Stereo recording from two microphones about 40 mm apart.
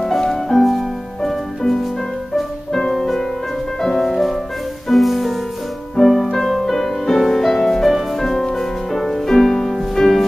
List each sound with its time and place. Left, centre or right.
0.0 s music: centre
0.6 s music: centre